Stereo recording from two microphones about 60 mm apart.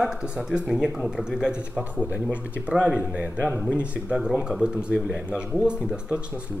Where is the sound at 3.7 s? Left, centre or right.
Centre.